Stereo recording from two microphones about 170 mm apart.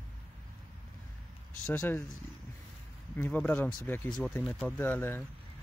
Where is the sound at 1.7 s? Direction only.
10° left (ahead or behind).